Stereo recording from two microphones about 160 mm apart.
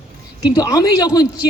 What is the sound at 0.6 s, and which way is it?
Speech, 20° left (ahead or behind).